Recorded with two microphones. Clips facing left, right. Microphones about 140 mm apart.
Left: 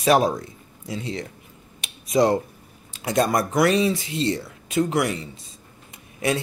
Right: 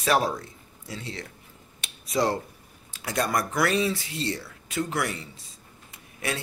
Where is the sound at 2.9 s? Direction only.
20° left (ahead or behind).